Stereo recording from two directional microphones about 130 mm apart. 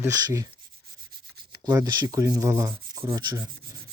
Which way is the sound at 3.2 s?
30° right (ahead or behind).